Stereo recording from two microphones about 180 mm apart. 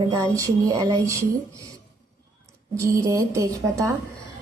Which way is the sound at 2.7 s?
15° right (ahead or behind).